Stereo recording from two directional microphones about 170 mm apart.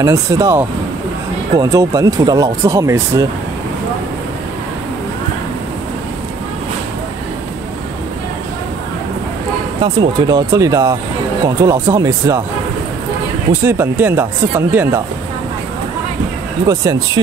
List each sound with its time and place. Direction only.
0.0 s speech: 15° right (ahead or behind)
9.8 s speech: 25° right (ahead or behind)
13.5 s speech: 15° right (ahead or behind)
16.6 s speech: 20° right (ahead or behind)